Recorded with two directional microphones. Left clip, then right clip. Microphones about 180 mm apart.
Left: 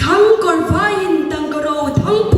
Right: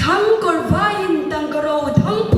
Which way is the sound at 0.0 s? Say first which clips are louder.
Left 4 dB; 35° left (ahead or behind).